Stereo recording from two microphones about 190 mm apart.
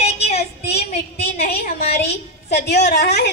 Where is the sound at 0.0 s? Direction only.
35° left (ahead or behind).